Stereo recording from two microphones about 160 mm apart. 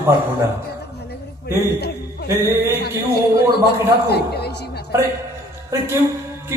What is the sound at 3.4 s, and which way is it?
A woman's voice, 90° left.